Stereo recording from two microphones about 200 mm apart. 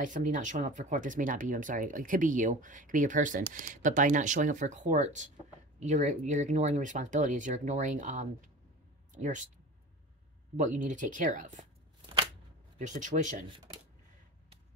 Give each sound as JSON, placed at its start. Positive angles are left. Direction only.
{"t": 0.0, "sound": "speech", "side_deg": -40}
{"t": 10.5, "sound": "speech", "side_deg": -40}
{"t": 12.7, "sound": "speech", "side_deg": -40}